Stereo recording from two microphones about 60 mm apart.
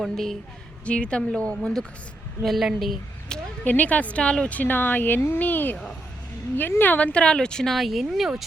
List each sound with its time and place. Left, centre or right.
0.0 s a woman's voice: centre
0.9 s speech: centre
2.4 s a woman's voice: centre
3.6 s speech: left; by 8.3 s centre